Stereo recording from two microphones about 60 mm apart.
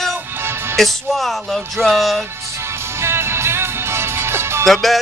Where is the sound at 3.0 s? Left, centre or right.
Right.